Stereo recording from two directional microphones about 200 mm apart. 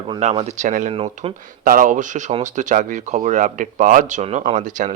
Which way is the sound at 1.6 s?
40° right (ahead or behind).